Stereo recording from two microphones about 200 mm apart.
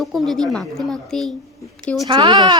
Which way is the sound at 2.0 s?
25° right (ahead or behind).